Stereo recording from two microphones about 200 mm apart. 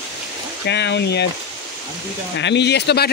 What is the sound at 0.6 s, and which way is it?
Speech, 60° left (ahead or behind).